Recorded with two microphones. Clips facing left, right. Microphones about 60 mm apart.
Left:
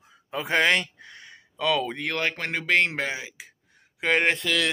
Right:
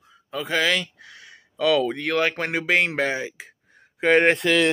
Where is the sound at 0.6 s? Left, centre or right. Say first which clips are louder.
Left 1 dB; left.